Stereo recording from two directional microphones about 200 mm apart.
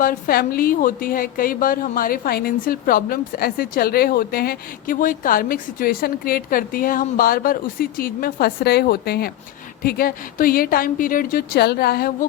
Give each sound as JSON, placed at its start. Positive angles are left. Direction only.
{"t": 0.0, "sound": "a woman's voice", "side_deg": 45}